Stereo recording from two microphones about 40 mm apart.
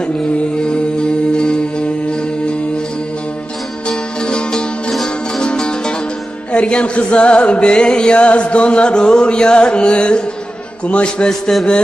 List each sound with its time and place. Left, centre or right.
0.7 s music: left
3.8 s music: left